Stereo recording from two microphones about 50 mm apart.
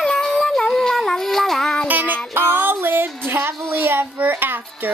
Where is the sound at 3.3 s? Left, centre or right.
Right.